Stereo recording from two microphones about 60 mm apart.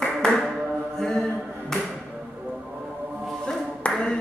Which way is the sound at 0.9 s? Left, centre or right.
Centre.